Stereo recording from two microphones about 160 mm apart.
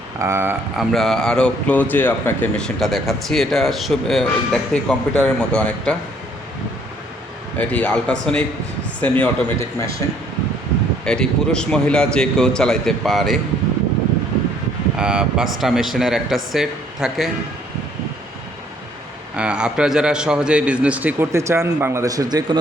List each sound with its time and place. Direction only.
0.2 s a man's voice: 15° right (ahead or behind)
0.8 s speech: centre (ahead or behind)
7.6 s a man's voice: 10° left (ahead or behind)
11.0 s speech: 5° left (ahead or behind)
14.9 s speech: 5° right (ahead or behind)
19.4 s a man's voice: 5° right (ahead or behind); by 22.6 s 25° right (ahead or behind)